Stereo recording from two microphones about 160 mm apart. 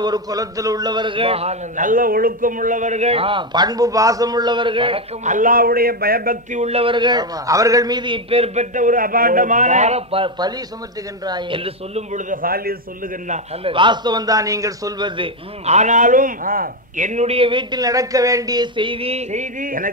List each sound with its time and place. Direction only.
0.0 s a man's voice: 25° right (ahead or behind)
5.2 s a man's voice: 55° right (ahead or behind); by 8.6 s 35° right (ahead or behind)
8.7 s a man's voice: 55° right (ahead or behind)
13.7 s a man's voice: 30° right (ahead or behind); by 19.9 s 60° right (ahead or behind)